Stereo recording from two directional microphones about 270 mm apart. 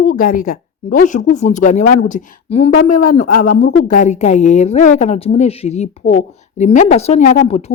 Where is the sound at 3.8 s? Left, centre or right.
Left.